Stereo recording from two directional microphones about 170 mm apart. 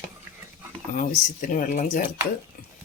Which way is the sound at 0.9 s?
50° left (ahead or behind).